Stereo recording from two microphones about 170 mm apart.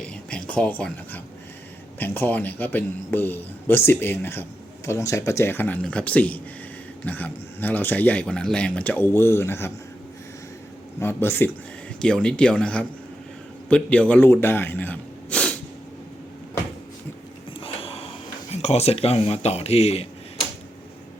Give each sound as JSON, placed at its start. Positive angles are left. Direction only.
{"t": 0.0, "sound": "speech", "side_deg": 5}
{"t": 11.0, "sound": "speech", "side_deg": 15}
{"t": 17.6, "sound": "a sound", "side_deg": 35}
{"t": 18.5, "sound": "speech", "side_deg": 40}